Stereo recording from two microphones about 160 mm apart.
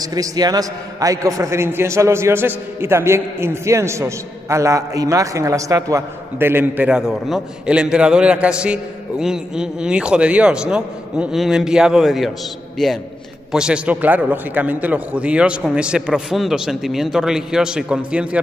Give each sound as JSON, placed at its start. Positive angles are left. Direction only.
{"t": 0.0, "sound": "a man's voice", "side_deg": -25}